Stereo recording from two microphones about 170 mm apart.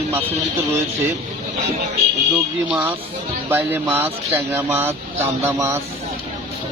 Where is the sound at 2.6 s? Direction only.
10° right (ahead or behind).